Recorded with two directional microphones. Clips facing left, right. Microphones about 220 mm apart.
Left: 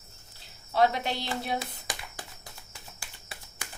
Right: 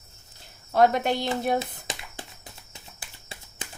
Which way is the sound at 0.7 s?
50° right (ahead or behind).